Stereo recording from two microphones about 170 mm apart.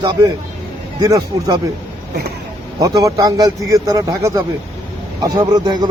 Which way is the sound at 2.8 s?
20° right (ahead or behind).